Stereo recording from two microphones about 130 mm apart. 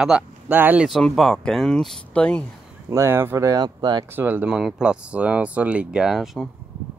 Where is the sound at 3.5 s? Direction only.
35° right (ahead or behind).